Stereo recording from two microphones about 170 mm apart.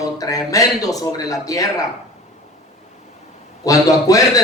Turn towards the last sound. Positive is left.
turn(degrees=20)  # may be behind; listen again after turning